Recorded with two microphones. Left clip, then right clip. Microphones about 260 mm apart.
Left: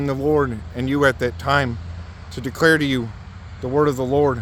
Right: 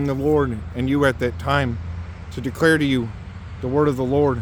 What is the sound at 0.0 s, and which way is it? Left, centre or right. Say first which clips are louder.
Speech: even; left.